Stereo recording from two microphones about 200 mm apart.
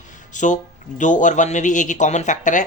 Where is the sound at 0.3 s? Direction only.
40° left (ahead or behind).